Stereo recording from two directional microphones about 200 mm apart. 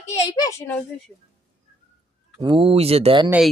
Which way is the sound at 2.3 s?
25° right (ahead or behind).